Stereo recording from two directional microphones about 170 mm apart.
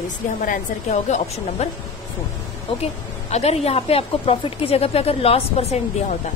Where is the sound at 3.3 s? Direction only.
40° left (ahead or behind).